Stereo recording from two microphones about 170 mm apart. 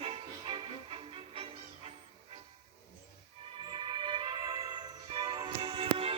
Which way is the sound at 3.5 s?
25° right (ahead or behind).